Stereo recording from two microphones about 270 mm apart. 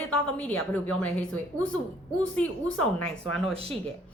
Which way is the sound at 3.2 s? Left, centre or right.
Left.